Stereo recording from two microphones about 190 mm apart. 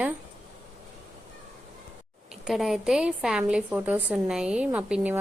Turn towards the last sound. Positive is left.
turn(degrees=-10)  # may be behind; listen again after turning